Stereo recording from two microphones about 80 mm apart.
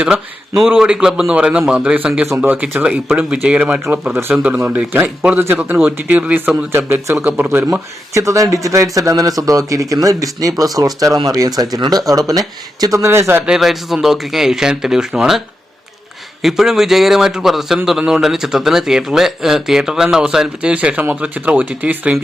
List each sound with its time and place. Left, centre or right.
0.8 s speech: centre
2.4 s speech: right
5.4 s speech: right
6.7 s speech: right
8.1 s speech: right
13.4 s speech: centre
16.4 s speech: centre